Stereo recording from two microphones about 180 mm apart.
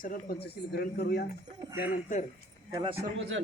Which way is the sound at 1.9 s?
45° left (ahead or behind).